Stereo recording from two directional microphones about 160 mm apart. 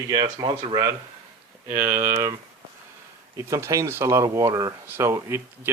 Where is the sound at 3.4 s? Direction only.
20° right (ahead or behind).